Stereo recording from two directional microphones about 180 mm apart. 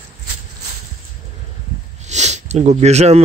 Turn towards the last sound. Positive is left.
turn(degrees=-35)  # may be behind; listen again after turning